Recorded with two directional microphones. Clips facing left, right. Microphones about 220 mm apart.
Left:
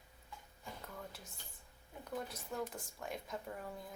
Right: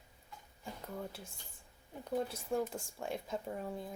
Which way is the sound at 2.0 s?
30° right (ahead or behind).